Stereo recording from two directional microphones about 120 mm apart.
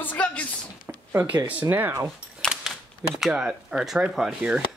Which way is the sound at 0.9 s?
15° right (ahead or behind).